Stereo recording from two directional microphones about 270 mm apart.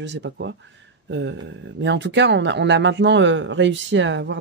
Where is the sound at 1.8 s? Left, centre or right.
Right.